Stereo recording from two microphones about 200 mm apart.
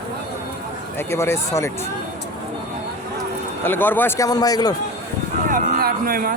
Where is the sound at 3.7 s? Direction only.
10° left (ahead or behind).